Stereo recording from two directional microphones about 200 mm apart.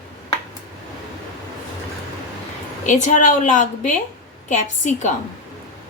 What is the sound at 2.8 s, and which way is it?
Speech, 40° left (ahead or behind).